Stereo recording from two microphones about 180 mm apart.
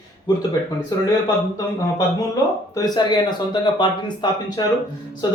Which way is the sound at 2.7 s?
20° left (ahead or behind).